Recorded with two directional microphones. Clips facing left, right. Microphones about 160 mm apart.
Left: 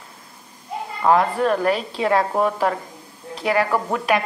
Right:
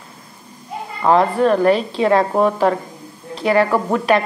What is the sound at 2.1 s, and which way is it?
Speech, 25° right (ahead or behind).